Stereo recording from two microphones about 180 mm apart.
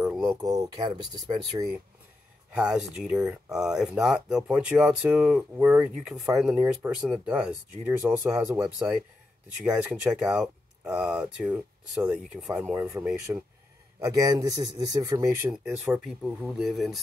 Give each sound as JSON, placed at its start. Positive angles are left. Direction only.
{"t": 0.3, "sound": "speech", "side_deg": -20}
{"t": 2.5, "sound": "speech", "side_deg": -5}
{"t": 12.9, "sound": "speech", "side_deg": -15}
{"t": 15.5, "sound": "speech", "side_deg": -5}